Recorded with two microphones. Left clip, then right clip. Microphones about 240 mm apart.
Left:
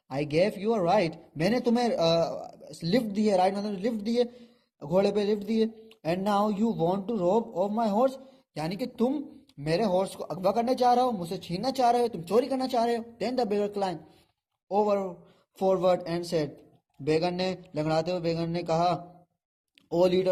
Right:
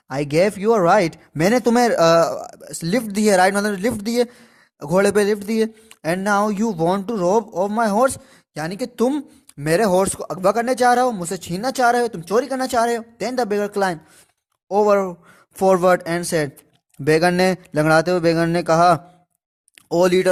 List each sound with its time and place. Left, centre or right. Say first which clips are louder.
0.1 s speech: right 8 dB; right